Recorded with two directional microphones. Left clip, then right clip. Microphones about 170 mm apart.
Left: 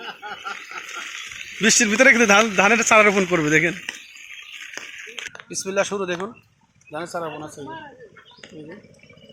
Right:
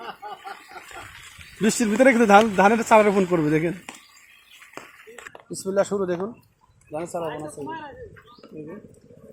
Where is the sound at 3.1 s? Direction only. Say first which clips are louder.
Left 2 dB; 5° left (ahead or behind).